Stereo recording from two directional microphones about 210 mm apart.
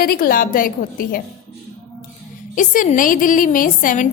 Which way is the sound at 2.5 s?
40° left (ahead or behind).